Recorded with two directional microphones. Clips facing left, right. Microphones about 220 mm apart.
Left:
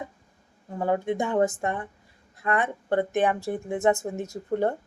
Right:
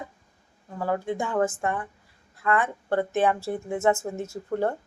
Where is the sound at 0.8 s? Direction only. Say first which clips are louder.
Left 2 dB; 20° left (ahead or behind).